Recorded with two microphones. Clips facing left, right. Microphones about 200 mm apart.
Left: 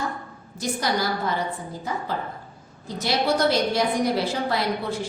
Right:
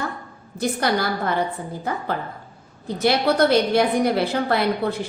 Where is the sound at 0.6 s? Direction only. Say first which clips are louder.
Right 4 dB; 60° right (ahead or behind).